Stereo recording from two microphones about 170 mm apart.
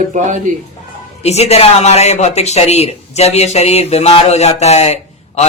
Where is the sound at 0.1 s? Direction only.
45° right (ahead or behind).